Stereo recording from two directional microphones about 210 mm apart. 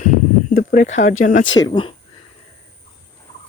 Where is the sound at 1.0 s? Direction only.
75° left (ahead or behind).